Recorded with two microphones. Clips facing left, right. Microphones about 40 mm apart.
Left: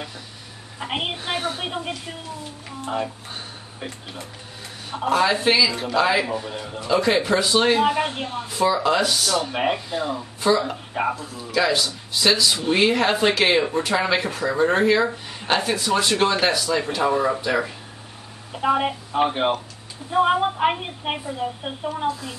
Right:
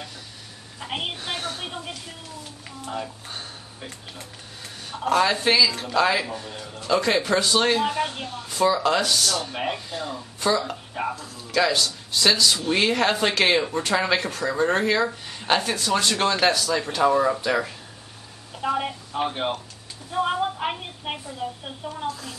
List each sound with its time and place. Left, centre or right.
0.7 s a woman's voice: centre
5.1 s speech: centre
7.0 s speech: centre
8.5 s speech: centre
18.5 s a woman's voice: centre